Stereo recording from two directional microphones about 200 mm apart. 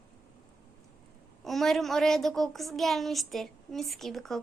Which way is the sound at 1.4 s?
Centre (ahead or behind).